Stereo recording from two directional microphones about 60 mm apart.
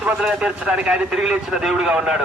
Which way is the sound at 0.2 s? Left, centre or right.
Centre.